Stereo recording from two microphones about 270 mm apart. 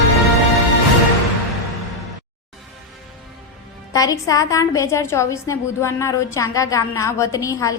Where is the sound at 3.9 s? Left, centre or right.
Centre.